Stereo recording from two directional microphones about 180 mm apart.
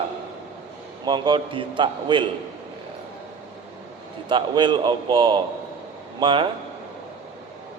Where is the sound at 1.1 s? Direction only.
25° right (ahead or behind).